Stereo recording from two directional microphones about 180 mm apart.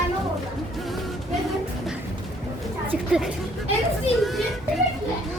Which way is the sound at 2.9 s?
5° right (ahead or behind).